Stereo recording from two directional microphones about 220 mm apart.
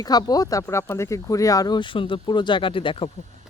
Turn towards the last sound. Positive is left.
turn(degrees=25)  # may be behind; listen again after turning